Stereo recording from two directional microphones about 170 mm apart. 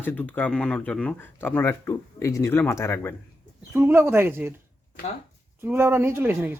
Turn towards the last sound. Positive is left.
turn(degrees=-10)  # may be behind; listen again after turning